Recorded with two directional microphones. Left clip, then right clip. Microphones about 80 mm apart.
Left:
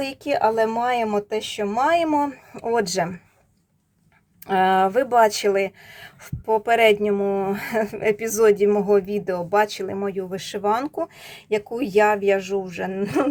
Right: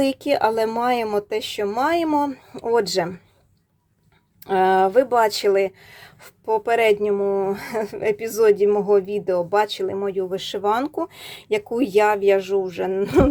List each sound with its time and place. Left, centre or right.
0.0 s speech: right; by 3.2 s centre
4.4 s speech: centre; by 11.1 s right
11.2 s speech: right